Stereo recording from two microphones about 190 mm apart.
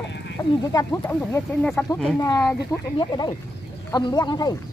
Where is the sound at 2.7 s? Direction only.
20° left (ahead or behind).